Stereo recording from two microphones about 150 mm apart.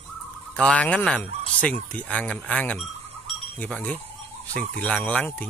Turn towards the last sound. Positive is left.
turn(degrees=10)  # may be behind; listen again after turning